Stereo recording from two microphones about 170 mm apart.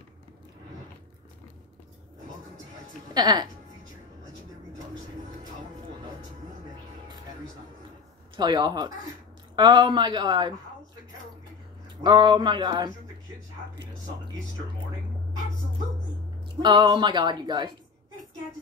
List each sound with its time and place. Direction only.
3.2 s speech: 25° right (ahead or behind)
8.4 s speech: 25° right (ahead or behind)
12.0 s speech: 25° right (ahead or behind)
16.6 s speech: 30° right (ahead or behind)